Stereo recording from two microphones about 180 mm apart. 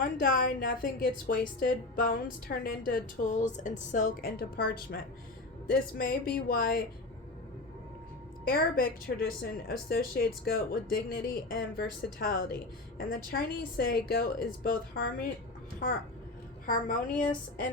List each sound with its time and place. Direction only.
0.2 s a woman's voice: 50° left (ahead or behind)
8.4 s a woman's voice: 55° left (ahead or behind)